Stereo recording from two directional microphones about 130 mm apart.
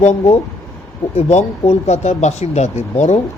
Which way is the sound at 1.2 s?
55° left (ahead or behind).